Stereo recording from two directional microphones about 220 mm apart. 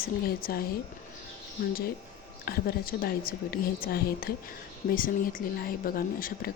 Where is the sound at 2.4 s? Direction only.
45° left (ahead or behind).